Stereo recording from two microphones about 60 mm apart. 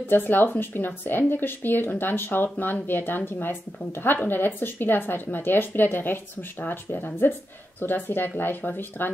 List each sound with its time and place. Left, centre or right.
0.0 s speech: left